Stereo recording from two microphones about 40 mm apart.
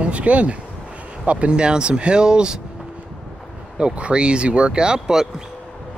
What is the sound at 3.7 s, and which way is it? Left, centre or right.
Speech, right.